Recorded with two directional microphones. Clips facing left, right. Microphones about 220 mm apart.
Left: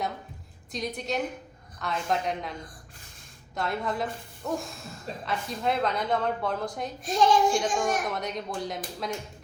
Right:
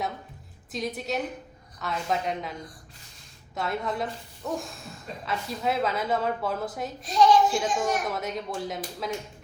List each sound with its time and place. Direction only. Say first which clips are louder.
0.7 s a woman's voice: right 1 dB; 5° right (ahead or behind)
7.0 s a woman's voice: right 2 dB; 50° left (ahead or behind)
7.5 s a woman's voice: even; centre (ahead or behind)